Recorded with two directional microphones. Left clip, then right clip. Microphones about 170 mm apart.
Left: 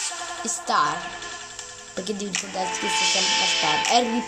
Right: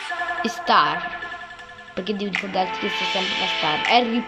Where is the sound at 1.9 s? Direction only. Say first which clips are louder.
Right 3 dB; centre (ahead or behind).